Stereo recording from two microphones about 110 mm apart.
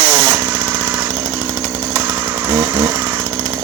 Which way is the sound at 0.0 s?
35° right (ahead or behind).